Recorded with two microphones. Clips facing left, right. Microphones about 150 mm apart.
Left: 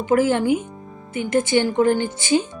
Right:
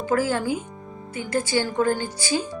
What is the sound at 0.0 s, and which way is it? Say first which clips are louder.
A woman's voice: left 5 dB; 20° left (ahead or behind).